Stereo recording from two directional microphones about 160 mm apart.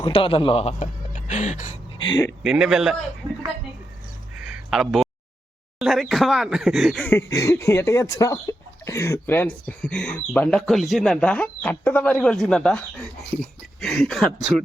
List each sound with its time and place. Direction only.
0.0 s speech: 35° left (ahead or behind); by 1.7 s 50° left (ahead or behind)
2.0 s speech: 30° left (ahead or behind)
2.4 s speech: 5° right (ahead or behind)
4.4 s a sound: 5° right (ahead or behind)
5.8 s speech: centre (ahead or behind)
7.0 s speech: 15° left (ahead or behind)